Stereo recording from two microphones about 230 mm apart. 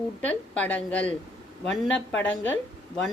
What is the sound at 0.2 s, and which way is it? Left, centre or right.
A woman's voice, centre.